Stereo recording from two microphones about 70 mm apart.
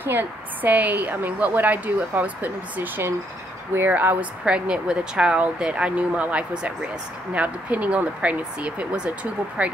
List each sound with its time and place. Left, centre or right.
0.0 s a woman's voice: right
4.5 s a woman's voice: centre